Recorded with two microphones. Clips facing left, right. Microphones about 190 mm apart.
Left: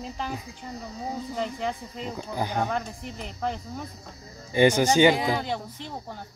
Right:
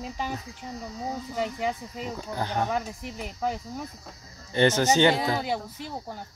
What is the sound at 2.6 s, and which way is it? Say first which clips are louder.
Speech: right 1 dB; 5° right (ahead or behind).